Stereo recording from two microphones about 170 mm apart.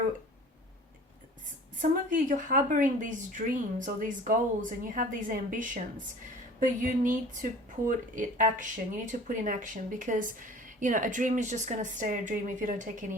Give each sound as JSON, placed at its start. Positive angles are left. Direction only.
{"t": 1.8, "sound": "speech", "side_deg": -50}